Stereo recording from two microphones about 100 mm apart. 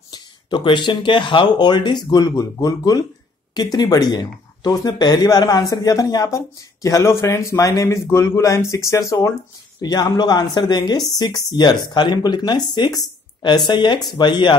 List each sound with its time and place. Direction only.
0.1 s speech: 50° left (ahead or behind); by 9.3 s 30° left (ahead or behind)
9.8 s speech: 40° left (ahead or behind)